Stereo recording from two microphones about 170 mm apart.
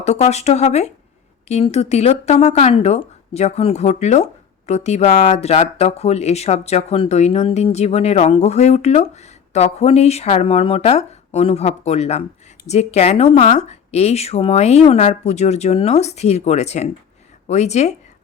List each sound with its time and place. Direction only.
0.0 s speech: 40° left (ahead or behind)